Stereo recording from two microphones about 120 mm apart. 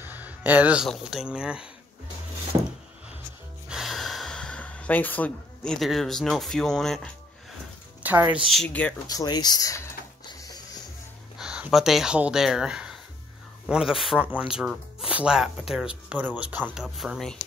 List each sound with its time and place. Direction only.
0.0 s music: 15° right (ahead or behind)
1.0 s speech: 5° right (ahead or behind)
3.6 s gasp: 5° right (ahead or behind)
8.0 s speech: 15° right (ahead or behind)
8.5 s speech: 5° left (ahead or behind)
9.0 s speech: 30° left (ahead or behind)
10.2 s music: 35° left (ahead or behind)
11.3 s speech: 10° right (ahead or behind)
16.7 s speech: centre (ahead or behind)